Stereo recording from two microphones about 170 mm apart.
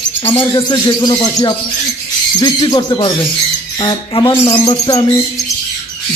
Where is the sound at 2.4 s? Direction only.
25° left (ahead or behind).